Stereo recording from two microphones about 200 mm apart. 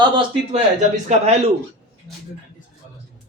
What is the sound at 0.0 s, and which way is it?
Speech, 25° right (ahead or behind).